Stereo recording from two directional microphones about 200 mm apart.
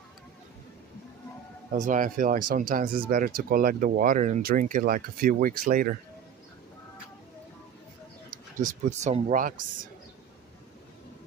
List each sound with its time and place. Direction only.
1.7 s speech: 40° right (ahead or behind)
8.3 s speech: 40° right (ahead or behind)